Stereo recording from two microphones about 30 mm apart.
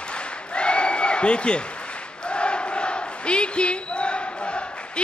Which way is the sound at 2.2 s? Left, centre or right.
Left.